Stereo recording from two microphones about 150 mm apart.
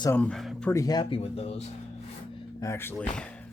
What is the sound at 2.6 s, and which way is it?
Speech, 15° left (ahead or behind).